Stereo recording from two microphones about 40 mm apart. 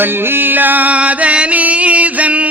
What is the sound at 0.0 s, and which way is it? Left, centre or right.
Music, right.